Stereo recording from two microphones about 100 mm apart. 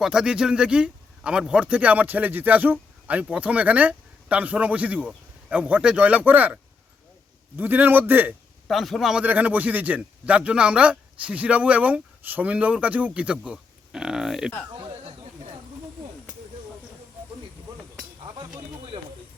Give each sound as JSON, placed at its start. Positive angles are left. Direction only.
{"t": 0.0, "sound": "a man's voice", "side_deg": -5}
{"t": 8.6, "sound": "a man's voice", "side_deg": 0}
{"t": 9.2, "sound": "speech", "side_deg": -15}
{"t": 14.7, "sound": "chatter", "side_deg": -55}
{"t": 18.2, "sound": "a sound", "side_deg": -50}